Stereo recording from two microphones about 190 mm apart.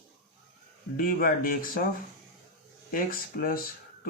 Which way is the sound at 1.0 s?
50° left (ahead or behind).